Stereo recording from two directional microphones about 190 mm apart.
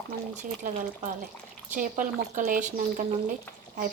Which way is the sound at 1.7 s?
45° right (ahead or behind).